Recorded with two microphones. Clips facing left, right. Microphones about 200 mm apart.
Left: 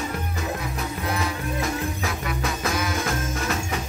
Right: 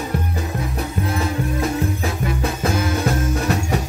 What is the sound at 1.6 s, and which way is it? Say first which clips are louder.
Music: right 5 dB; 30° right (ahead or behind).